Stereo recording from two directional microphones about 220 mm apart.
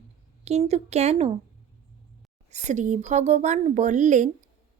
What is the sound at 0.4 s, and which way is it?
Speech, 30° right (ahead or behind).